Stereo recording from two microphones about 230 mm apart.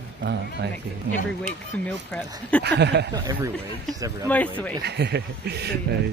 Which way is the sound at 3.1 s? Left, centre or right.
Centre.